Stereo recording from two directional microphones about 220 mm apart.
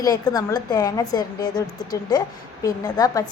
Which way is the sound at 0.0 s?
15° left (ahead or behind).